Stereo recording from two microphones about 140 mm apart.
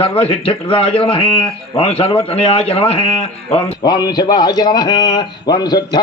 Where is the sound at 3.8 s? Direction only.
30° left (ahead or behind).